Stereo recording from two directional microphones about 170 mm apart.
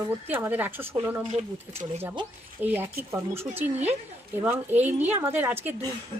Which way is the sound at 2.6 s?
10° right (ahead or behind).